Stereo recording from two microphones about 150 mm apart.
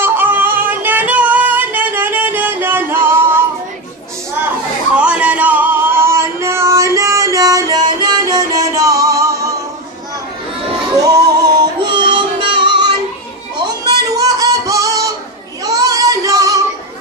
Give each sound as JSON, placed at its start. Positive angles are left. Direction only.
{"t": 0.0, "sound": "yodeling", "side_deg": -15}
{"t": 4.9, "sound": "music", "side_deg": -5}
{"t": 11.0, "sound": "music", "side_deg": -25}
{"t": 14.1, "sound": "a sound", "side_deg": -25}
{"t": 15.6, "sound": "female singing", "side_deg": -25}